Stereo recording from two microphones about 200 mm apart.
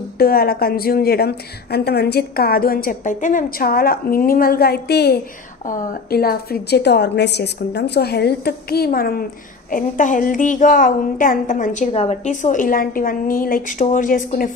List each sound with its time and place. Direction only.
0.2 s a woman's voice: 50° left (ahead or behind)